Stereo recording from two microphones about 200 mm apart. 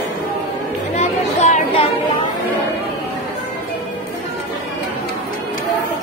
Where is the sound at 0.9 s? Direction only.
35° left (ahead or behind).